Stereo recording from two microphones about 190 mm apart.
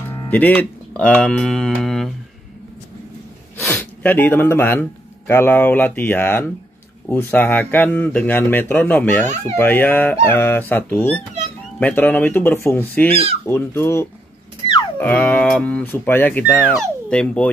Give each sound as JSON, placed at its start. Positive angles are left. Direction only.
{"t": 0.3, "sound": "speech", "side_deg": 10}
{"t": 3.6, "sound": "speech", "side_deg": 10}